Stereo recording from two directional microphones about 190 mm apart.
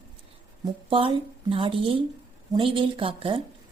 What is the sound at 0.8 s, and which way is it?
Speech, 30° right (ahead or behind).